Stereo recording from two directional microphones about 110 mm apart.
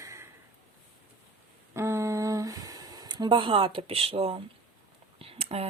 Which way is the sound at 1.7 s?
25° right (ahead or behind).